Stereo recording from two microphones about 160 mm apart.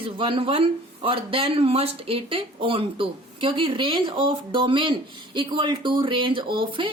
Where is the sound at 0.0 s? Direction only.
35° right (ahead or behind).